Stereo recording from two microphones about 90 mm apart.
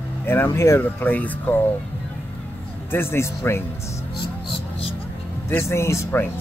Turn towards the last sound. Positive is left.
turn(degrees=25)  # may be behind; listen again after turning